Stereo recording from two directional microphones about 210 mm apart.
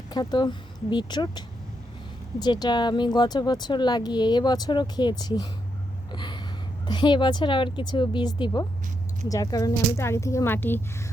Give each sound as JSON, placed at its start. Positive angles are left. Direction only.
{"t": 0.1, "sound": "speech", "side_deg": 20}
{"t": 6.1, "sound": "gasp", "side_deg": 20}
{"t": 6.8, "sound": "speech", "side_deg": 20}